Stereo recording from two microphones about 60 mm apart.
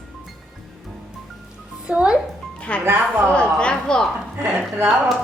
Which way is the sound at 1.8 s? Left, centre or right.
Centre.